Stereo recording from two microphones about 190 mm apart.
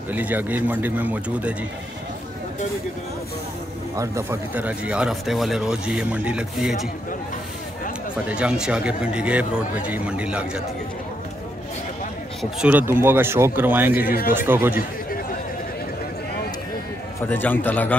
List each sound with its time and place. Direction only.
0.1 s speech: 10° right (ahead or behind)
3.9 s speech: 15° right (ahead or behind)
8.3 s speech: 5° right (ahead or behind)
12.4 s speech: 5° right (ahead or behind)
14.0 s speech: 50° left (ahead or behind)
14.3 s speech: 10° right (ahead or behind)
17.3 s a man's voice: 10° left (ahead or behind)